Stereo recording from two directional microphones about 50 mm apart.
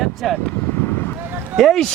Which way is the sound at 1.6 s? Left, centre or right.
Centre.